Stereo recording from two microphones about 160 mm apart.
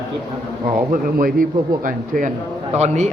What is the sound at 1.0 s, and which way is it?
Speech, 60° right (ahead or behind).